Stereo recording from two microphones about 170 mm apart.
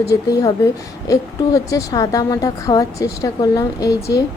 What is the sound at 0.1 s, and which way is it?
A woman's voice, 20° left (ahead or behind).